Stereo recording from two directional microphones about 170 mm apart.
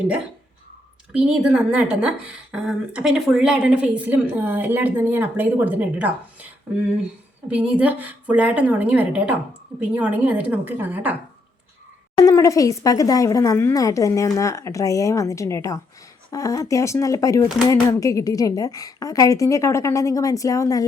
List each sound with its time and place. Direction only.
1.1 s a woman's voice: 5° right (ahead or behind)
7.4 s a woman's voice: 10° right (ahead or behind)
12.1 s speech: 20° left (ahead or behind)